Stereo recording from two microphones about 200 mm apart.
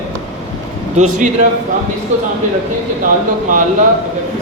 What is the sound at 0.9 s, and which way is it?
Speech, 40° right (ahead or behind).